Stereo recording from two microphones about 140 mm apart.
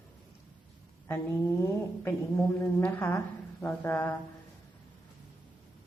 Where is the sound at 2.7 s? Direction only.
15° left (ahead or behind).